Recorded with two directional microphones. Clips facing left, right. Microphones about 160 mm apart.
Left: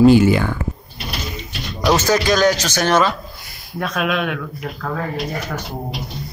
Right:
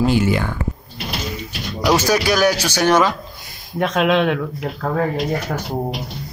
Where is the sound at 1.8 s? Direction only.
10° right (ahead or behind).